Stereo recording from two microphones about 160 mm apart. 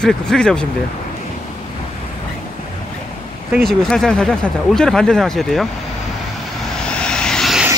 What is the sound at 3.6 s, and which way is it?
Speech, 5° left (ahead or behind).